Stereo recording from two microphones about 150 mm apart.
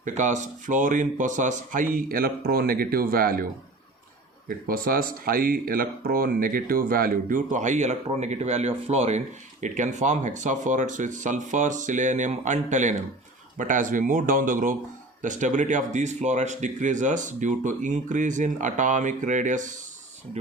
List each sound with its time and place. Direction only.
0.0 s speech: 55° right (ahead or behind); by 3.4 s 75° right (ahead or behind)
4.4 s speech: 75° right (ahead or behind); by 19.7 s 55° right (ahead or behind)